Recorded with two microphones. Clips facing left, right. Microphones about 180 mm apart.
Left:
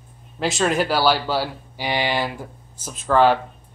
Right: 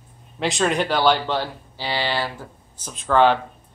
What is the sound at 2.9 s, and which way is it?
Speech, 5° left (ahead or behind).